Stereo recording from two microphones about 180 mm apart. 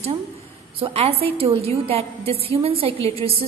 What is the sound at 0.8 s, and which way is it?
A woman's voice, 35° right (ahead or behind).